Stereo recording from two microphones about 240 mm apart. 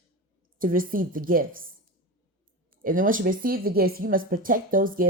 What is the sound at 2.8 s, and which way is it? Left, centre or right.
Speech, right.